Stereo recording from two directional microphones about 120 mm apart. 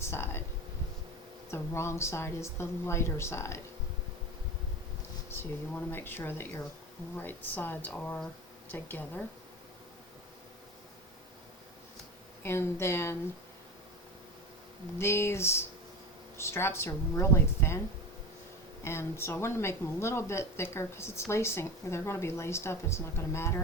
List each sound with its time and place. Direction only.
0.0 s speech: 20° left (ahead or behind)
1.5 s speech: 20° left (ahead or behind)
5.3 s speech: 20° left (ahead or behind)
12.4 s speech: 20° left (ahead or behind)
14.9 s speech: 20° left (ahead or behind)
18.9 s speech: 20° left (ahead or behind)